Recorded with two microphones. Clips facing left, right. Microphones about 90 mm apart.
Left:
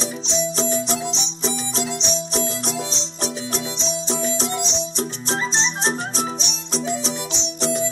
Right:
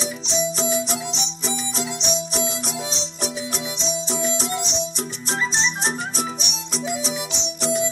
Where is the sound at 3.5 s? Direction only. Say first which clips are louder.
Left 1 dB; 25° left (ahead or behind).